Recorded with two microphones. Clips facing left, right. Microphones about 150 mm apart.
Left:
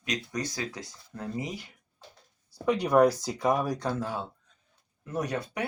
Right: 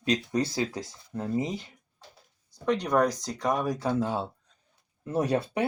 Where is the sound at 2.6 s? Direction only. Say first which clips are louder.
Left 3 dB; 10° left (ahead or behind).